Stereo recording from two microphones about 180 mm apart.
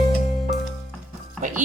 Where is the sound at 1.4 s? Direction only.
45° right (ahead or behind).